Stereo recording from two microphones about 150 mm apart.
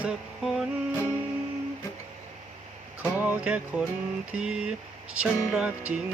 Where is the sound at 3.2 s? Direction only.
10° right (ahead or behind).